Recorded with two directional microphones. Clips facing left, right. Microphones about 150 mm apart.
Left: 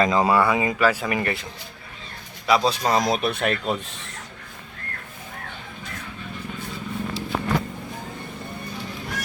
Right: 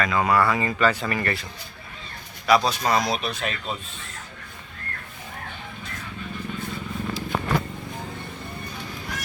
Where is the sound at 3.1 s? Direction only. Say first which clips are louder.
Left 5 dB; 55° left (ahead or behind); by 4.1 s 75° left (ahead or behind).